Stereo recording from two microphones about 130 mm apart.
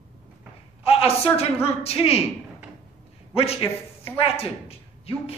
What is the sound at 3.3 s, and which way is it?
A man's voice, 50° left (ahead or behind).